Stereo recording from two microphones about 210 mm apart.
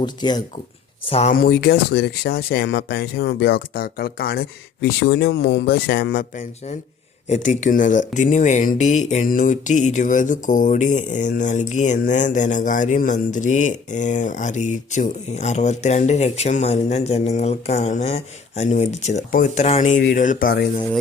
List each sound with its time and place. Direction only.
0.0 s speech: 20° left (ahead or behind)
1.3 s speech: 45° left (ahead or behind)